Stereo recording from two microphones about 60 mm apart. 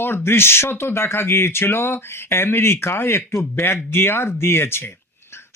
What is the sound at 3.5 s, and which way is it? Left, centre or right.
Speech, left.